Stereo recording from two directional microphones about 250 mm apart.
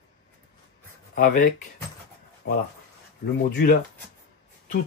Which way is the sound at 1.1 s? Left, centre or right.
Left.